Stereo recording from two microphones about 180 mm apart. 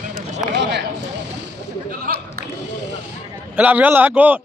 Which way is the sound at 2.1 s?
55° right (ahead or behind).